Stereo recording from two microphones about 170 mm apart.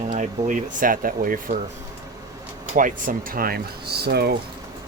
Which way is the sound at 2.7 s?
50° right (ahead or behind).